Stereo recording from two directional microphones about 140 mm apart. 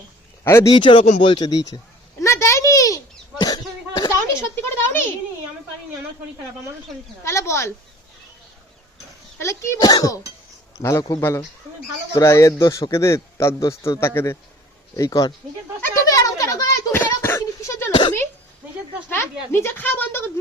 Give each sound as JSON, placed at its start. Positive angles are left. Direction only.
{"t": 0.4, "sound": "a man's voice", "side_deg": 20}
{"t": 0.7, "sound": "speech", "side_deg": 35}
{"t": 2.2, "sound": "a sound", "side_deg": 20}
{"t": 3.4, "sound": "cough", "side_deg": 30}
{"t": 4.4, "sound": "a man's voice", "side_deg": 20}
{"t": 7.3, "sound": "a man's voice", "side_deg": 20}
{"t": 9.4, "sound": "a man's voice", "side_deg": 20}
{"t": 15.8, "sound": "a sound", "side_deg": 25}
{"t": 19.0, "sound": "speech", "side_deg": 15}